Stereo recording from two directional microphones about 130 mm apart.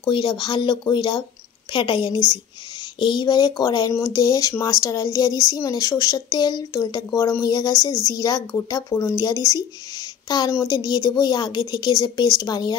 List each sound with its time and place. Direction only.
0.0 s a woman's voice: 35° left (ahead or behind)